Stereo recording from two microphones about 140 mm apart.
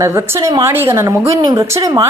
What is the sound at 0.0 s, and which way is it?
Speech, 20° right (ahead or behind).